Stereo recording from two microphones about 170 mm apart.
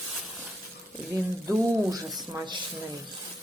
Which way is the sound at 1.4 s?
15° right (ahead or behind).